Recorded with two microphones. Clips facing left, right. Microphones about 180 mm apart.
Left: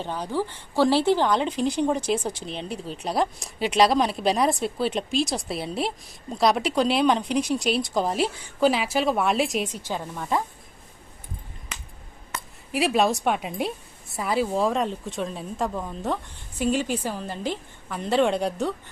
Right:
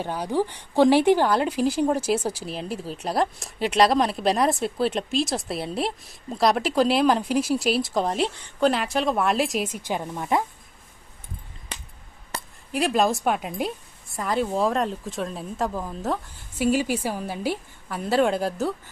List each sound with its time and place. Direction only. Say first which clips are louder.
0.0 s a woman's voice: right 3 dB; 10° right (ahead or behind)
9.8 s speech: right 2 dB; 15° right (ahead or behind)
12.3 s dishes: right 1 dB; 35° right (ahead or behind)
12.7 s a woman's voice: even; centre (ahead or behind)